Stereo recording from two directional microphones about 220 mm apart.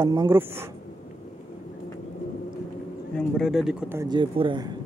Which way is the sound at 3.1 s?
Centre (ahead or behind).